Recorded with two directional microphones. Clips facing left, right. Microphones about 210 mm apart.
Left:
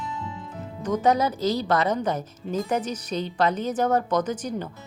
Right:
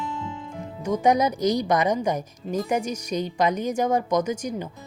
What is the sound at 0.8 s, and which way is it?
A woman's voice, 10° right (ahead or behind).